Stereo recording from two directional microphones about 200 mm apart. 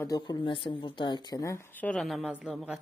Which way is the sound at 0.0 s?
20° left (ahead or behind).